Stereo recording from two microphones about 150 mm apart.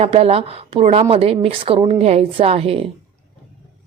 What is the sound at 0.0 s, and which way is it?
A woman's voice, 45° right (ahead or behind).